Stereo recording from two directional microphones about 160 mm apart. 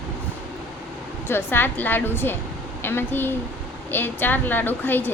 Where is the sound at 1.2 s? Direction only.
15° left (ahead or behind).